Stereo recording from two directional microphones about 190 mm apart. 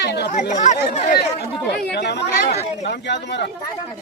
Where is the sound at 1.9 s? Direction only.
65° left (ahead or behind).